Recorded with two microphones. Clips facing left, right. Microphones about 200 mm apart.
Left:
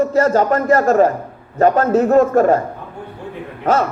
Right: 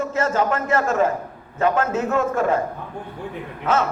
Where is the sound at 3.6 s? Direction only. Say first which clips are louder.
Left 5 dB; 35° left (ahead or behind).